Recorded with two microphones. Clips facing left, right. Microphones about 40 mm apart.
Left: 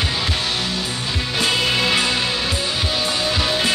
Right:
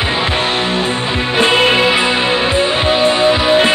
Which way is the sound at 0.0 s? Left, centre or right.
Right.